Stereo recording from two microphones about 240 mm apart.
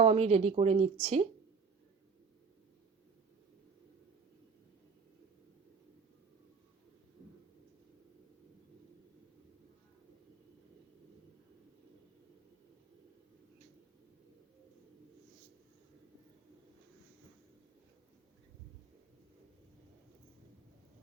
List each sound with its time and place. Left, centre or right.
0.0 s speech: right